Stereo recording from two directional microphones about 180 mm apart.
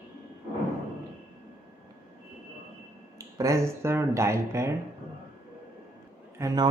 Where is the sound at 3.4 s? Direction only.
15° right (ahead or behind).